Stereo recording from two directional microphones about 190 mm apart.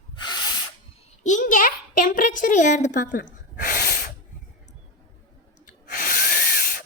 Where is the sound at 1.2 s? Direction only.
40° left (ahead or behind).